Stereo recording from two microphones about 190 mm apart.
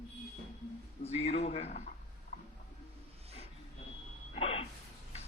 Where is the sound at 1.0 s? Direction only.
35° left (ahead or behind).